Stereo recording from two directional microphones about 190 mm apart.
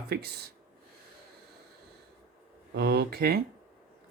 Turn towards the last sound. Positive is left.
turn(degrees=-55)  # may be behind; listen again after turning